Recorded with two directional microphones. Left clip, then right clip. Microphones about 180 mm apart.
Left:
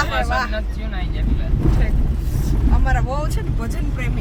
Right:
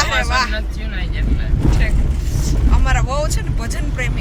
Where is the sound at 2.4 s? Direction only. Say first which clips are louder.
Right 2 dB; 30° left (ahead or behind).